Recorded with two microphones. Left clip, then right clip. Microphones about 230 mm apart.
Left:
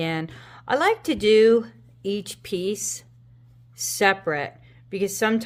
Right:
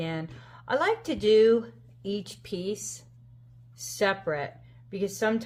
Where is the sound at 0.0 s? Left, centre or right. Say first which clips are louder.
Left 7 dB; left.